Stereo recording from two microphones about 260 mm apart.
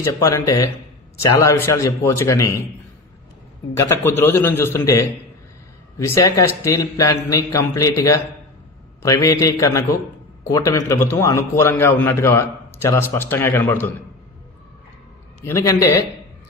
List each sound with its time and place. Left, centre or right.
0.0 s a man's voice: centre
3.7 s a man's voice: centre
15.4 s a man's voice: centre